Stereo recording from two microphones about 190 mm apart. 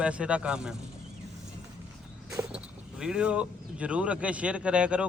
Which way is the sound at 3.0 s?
5° right (ahead or behind).